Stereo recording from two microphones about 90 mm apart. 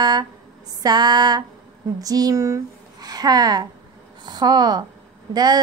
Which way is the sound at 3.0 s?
50° right (ahead or behind).